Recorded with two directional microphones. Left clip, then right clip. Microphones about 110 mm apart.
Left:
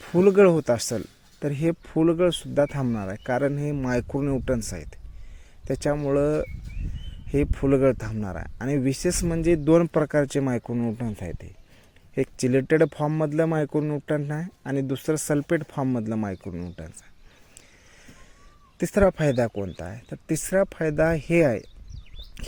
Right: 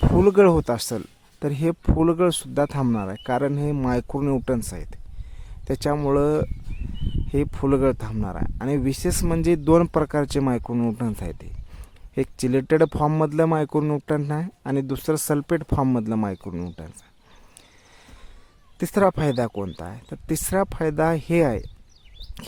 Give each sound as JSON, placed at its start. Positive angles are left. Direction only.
{"t": 0.2, "sound": "speech", "side_deg": -25}
{"t": 0.6, "sound": "speech", "side_deg": -15}
{"t": 3.8, "sound": "speech", "side_deg": -15}
{"t": 4.2, "sound": "speech", "side_deg": -30}
{"t": 4.6, "sound": "speech", "side_deg": -15}
{"t": 5.6, "sound": "speech", "side_deg": -30}
{"t": 9.2, "sound": "speech", "side_deg": -30}
{"t": 10.7, "sound": "speech", "side_deg": -30}
{"t": 16.5, "sound": "speech", "side_deg": -35}
{"t": 18.8, "sound": "speech", "side_deg": -25}